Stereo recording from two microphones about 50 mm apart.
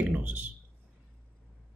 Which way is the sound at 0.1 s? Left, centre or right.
Right.